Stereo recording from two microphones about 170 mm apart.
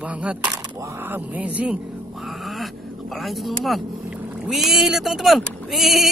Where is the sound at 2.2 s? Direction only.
Centre (ahead or behind).